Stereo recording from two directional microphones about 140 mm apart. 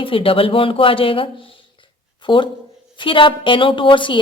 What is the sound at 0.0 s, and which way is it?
A woman's voice, 40° left (ahead or behind).